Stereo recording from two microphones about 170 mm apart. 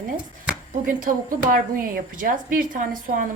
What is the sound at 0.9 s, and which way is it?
A woman's voice, 55° right (ahead or behind).